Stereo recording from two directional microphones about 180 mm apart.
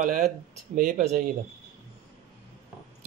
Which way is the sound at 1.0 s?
40° right (ahead or behind).